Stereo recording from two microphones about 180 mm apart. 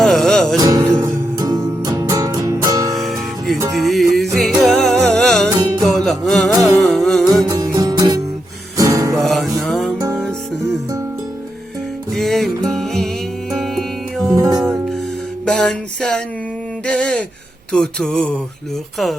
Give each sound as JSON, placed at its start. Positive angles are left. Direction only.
{"t": 0.0, "sound": "music", "side_deg": 5}
{"t": 0.5, "sound": "music", "side_deg": -20}
{"t": 2.9, "sound": "music", "side_deg": 0}
{"t": 7.4, "sound": "music", "side_deg": -20}
{"t": 9.1, "sound": "music", "side_deg": 0}
{"t": 12.1, "sound": "music", "side_deg": 0}
{"t": 14.3, "sound": "music", "side_deg": -15}
{"t": 15.4, "sound": "a sound", "side_deg": 5}